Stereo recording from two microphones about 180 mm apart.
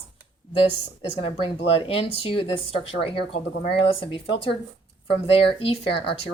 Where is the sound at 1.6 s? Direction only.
30° left (ahead or behind).